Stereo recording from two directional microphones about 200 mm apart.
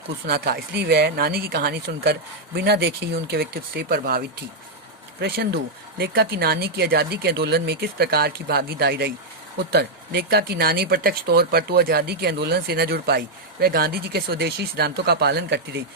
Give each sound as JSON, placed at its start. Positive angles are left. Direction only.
{"t": 0.3, "sound": "speech", "side_deg": -50}